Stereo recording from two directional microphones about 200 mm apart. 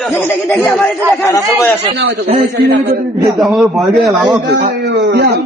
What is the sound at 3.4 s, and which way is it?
Speech, centre (ahead or behind).